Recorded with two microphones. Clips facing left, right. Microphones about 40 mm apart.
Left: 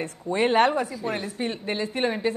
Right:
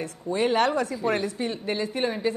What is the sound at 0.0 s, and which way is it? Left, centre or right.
Speech, left.